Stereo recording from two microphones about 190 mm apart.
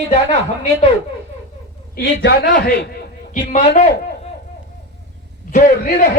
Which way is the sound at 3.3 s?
40° left (ahead or behind).